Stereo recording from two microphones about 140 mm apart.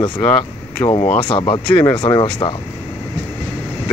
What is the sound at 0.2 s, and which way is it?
Speech, 10° left (ahead or behind).